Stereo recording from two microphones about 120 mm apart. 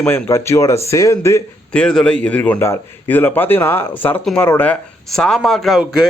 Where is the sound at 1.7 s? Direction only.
5° left (ahead or behind).